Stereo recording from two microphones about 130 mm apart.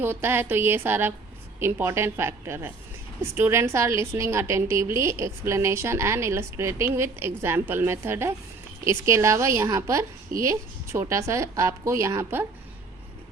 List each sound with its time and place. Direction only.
0.0 s a woman's voice: 15° right (ahead or behind)